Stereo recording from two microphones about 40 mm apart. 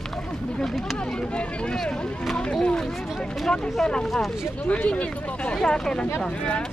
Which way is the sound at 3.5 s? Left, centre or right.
Centre.